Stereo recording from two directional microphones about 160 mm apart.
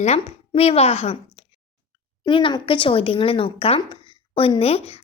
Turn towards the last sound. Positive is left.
turn(degrees=40)  # may be behind; listen again after turning